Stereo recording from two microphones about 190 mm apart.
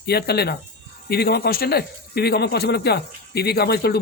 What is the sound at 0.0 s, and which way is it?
Speech, 55° left (ahead or behind).